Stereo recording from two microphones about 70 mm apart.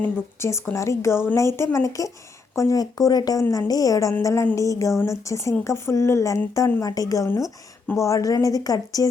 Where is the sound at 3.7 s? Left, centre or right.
Left.